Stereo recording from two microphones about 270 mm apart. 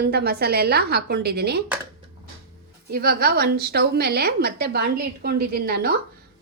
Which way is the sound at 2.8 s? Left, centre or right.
Right.